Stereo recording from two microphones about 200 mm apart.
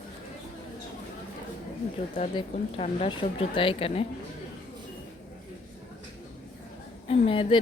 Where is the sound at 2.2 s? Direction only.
30° left (ahead or behind).